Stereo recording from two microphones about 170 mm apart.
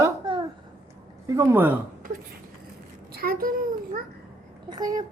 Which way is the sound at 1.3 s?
15° right (ahead or behind).